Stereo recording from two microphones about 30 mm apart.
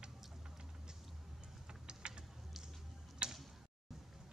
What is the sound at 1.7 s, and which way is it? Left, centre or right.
Typing, right.